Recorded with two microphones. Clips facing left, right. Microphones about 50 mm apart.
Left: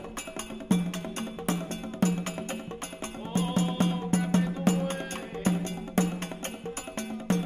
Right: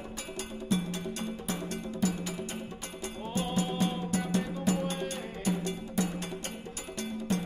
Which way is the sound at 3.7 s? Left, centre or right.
Left.